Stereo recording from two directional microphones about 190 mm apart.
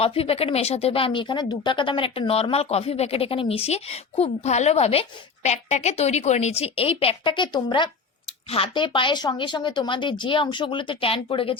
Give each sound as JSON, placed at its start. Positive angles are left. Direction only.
{"t": 0.0, "sound": "speech", "side_deg": 30}